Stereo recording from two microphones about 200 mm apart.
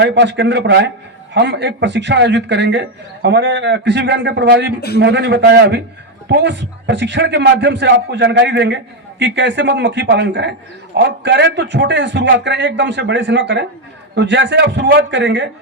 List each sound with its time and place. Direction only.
0.0 s a man's voice: 60° right (ahead or behind)